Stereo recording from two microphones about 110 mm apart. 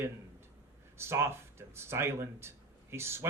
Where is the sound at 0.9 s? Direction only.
25° right (ahead or behind).